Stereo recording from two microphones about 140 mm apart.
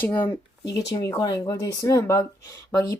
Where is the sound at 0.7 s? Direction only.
25° left (ahead or behind).